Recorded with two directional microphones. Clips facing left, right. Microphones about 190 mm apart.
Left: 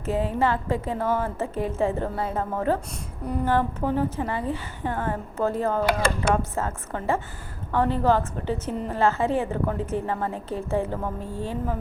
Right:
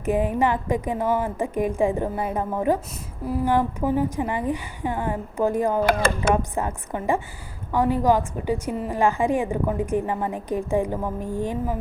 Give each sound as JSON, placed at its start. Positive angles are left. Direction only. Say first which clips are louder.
{"t": 0.0, "sound": "a woman's voice", "louder": "right 3 dB", "side_deg": -15}
{"t": 5.8, "sound": "speech", "louder": "right 2 dB", "side_deg": -55}
{"t": 6.3, "sound": "a woman's voice", "louder": "right 2 dB", "side_deg": -15}